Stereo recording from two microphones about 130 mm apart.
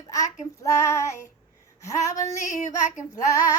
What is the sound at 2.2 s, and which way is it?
Female singing, 65° left (ahead or behind).